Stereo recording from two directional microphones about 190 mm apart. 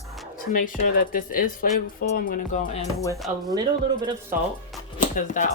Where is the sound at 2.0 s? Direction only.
45° left (ahead or behind).